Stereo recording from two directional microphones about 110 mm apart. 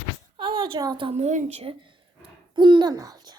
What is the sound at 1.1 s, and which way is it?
Speech, 80° right.